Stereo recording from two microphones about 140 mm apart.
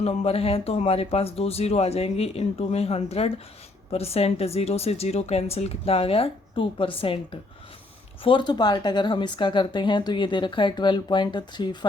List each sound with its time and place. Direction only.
0.0 s speech: 45° left (ahead or behind)
8.2 s speech: 35° left (ahead or behind)